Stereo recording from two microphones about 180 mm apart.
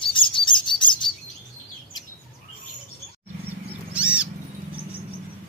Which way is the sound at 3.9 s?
5° right (ahead or behind).